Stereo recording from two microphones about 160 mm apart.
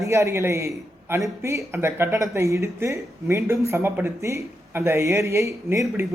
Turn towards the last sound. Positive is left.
turn(degrees=-15)  # may be behind; listen again after turning